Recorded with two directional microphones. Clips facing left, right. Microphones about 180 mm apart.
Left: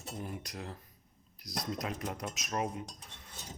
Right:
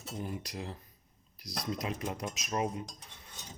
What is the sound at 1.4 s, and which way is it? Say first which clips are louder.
Speech: left 1 dB; 20° left (ahead or behind).